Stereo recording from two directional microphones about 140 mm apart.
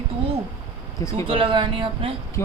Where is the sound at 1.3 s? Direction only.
40° right (ahead or behind).